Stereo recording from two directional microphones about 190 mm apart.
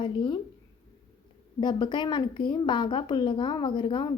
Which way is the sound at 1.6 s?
25° left (ahead or behind).